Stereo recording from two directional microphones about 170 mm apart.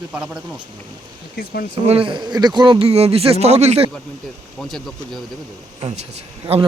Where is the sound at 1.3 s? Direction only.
65° left (ahead or behind).